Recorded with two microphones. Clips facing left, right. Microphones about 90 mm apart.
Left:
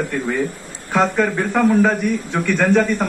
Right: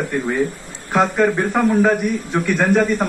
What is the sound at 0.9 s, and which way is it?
A man's voice, 10° right (ahead or behind).